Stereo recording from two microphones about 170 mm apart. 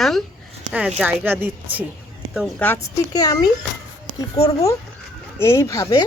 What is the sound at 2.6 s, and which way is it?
Speech, 10° left (ahead or behind).